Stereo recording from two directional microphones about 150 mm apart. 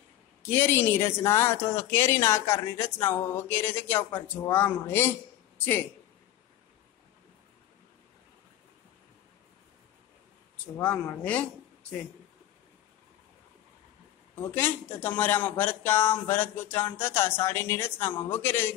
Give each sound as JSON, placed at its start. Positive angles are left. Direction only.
{"t": 0.4, "sound": "speech", "side_deg": 15}
{"t": 14.4, "sound": "speech", "side_deg": 15}